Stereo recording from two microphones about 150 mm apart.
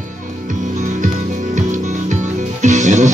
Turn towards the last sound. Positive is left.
turn(degrees=-55)  # may be behind; listen again after turning